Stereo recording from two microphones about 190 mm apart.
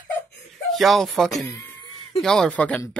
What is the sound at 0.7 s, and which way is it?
Speech, centre (ahead or behind).